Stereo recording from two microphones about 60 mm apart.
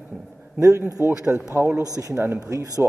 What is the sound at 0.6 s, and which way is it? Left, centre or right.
Speech, right.